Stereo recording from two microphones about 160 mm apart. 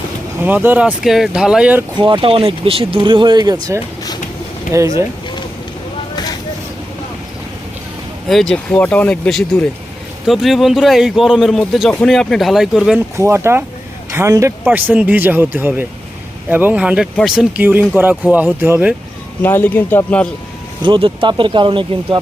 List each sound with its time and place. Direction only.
0.4 s speech: 10° right (ahead or behind)
2.0 s speech: 30° right (ahead or behind)
8.3 s a man's voice: 5° left (ahead or behind)
13.1 s a man's voice: 15° right (ahead or behind); by 17.4 s centre (ahead or behind)
17.6 s speech: 10° right (ahead or behind)
19.4 s speech: 10° left (ahead or behind)
20.8 s speech: 30° right (ahead or behind)